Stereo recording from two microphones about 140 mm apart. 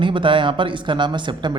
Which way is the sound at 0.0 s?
35° right (ahead or behind).